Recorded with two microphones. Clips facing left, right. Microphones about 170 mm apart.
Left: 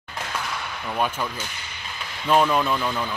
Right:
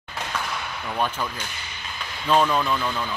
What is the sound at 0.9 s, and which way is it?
A man's voice, 10° left (ahead or behind).